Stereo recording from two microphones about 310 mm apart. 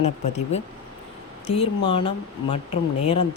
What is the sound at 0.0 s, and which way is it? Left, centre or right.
Speech, left.